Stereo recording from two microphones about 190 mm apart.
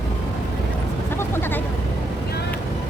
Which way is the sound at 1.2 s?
10° left (ahead or behind).